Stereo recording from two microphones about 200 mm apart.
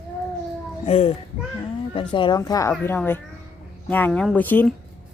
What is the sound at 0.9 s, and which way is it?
Speech, 30° left (ahead or behind).